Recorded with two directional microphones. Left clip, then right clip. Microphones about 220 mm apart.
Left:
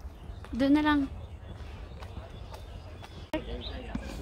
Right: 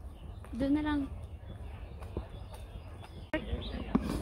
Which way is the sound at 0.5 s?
30° left (ahead or behind).